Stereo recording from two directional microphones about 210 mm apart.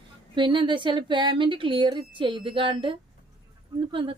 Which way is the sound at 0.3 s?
25° right (ahead or behind).